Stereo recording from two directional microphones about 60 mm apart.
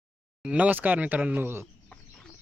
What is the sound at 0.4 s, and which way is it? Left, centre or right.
Speech, right.